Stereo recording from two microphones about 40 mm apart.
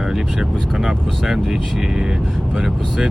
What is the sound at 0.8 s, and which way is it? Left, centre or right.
Speech, centre.